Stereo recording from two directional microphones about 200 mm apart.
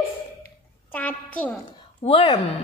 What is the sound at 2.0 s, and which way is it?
Speech, 30° left (ahead or behind).